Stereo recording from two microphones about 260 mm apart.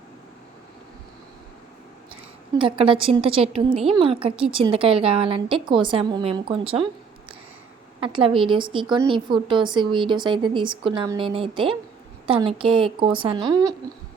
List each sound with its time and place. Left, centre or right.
2.6 s a woman's voice: centre
8.0 s a woman's voice: centre